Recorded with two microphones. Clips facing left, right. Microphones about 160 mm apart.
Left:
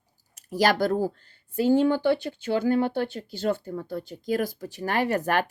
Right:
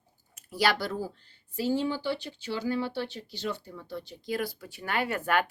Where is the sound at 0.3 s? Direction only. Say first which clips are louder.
Left 5 dB; 45° left (ahead or behind).